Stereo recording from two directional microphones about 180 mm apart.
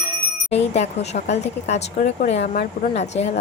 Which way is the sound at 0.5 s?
35° left (ahead or behind).